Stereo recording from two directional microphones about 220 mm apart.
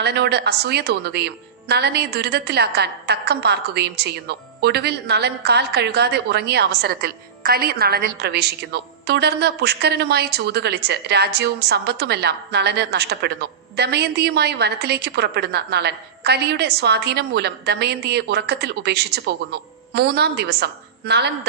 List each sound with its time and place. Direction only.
0.0 s a woman's voice: 50° right (ahead or behind)